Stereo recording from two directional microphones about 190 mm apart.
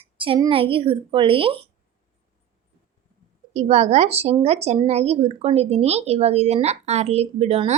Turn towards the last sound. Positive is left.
turn(degrees=-35)  # may be behind; listen again after turning